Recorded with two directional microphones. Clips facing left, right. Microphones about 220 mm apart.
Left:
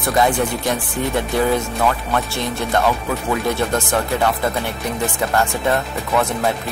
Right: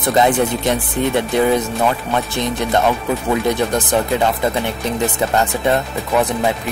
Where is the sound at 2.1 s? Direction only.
20° right (ahead or behind).